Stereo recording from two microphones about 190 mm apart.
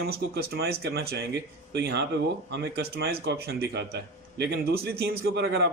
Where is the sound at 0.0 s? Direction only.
55° right (ahead or behind).